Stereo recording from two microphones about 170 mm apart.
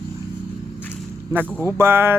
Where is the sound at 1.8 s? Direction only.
15° right (ahead or behind).